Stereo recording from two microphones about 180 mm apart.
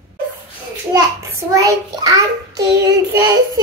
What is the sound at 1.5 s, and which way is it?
Child singing, 20° right (ahead or behind).